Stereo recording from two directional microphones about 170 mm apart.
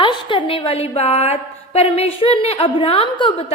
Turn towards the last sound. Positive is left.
turn(degrees=30)  # may be behind; listen again after turning